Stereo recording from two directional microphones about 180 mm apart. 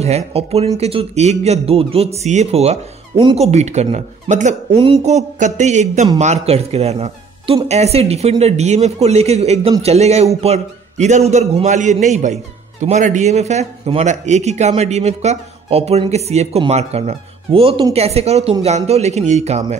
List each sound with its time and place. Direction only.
0.0 s speech: 35° right (ahead or behind)